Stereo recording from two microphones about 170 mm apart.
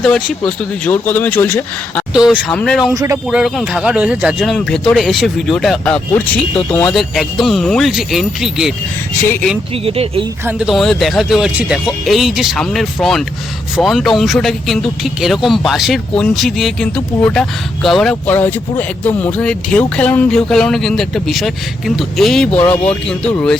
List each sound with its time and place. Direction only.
0.0 s speech: 5° left (ahead or behind)
2.1 s speech: 5° right (ahead or behind)
2.9 s speech: 20° right (ahead or behind)
3.2 s speech: centre (ahead or behind)
6.9 s speech: centre (ahead or behind)
9.2 s speech: 15° left (ahead or behind)
9.8 s speech: 35° right (ahead or behind)
10.4 s speech: 5° right (ahead or behind)